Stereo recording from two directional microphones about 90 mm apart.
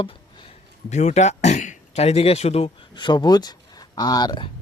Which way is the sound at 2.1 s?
90° left.